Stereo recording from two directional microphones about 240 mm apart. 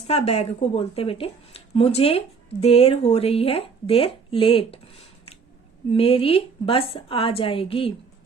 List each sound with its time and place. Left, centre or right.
0.1 s speech: left
5.9 s speech: left